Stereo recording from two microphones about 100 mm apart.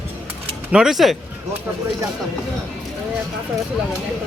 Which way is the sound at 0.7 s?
5° right (ahead or behind).